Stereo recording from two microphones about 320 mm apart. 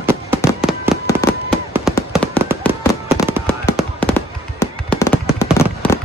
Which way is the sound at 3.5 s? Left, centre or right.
Centre.